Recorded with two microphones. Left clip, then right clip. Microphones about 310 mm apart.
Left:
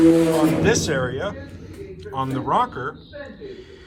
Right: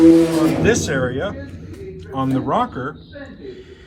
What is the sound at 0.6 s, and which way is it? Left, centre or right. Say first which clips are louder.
Speech: right 2 dB; centre.